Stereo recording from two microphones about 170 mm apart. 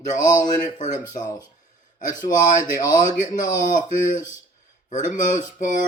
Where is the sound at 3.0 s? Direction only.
50° left (ahead or behind).